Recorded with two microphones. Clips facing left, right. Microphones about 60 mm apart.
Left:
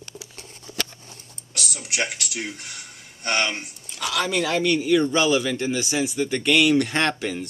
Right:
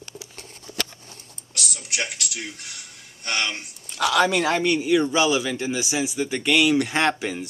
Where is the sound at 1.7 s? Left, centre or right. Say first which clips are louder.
Left 3 dB; left.